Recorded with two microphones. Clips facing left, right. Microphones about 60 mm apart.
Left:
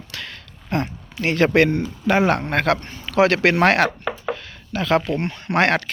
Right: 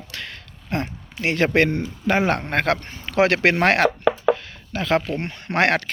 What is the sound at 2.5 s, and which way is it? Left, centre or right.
A man's voice, right.